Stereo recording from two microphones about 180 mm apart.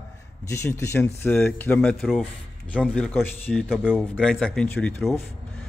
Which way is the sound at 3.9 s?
10° left (ahead or behind).